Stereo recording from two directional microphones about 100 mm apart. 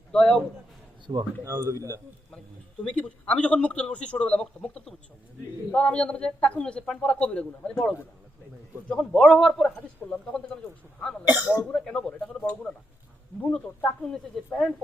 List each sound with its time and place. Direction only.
0.1 s a man's voice: 5° left (ahead or behind)
1.1 s speech: 55° right (ahead or behind)
1.5 s speech: 30° right (ahead or behind)
2.8 s a man's voice: 10° left (ahead or behind)
11.3 s speech: 15° right (ahead or behind)
11.7 s a man's voice: 5° left (ahead or behind)
13.4 s a man's voice: 10° left (ahead or behind)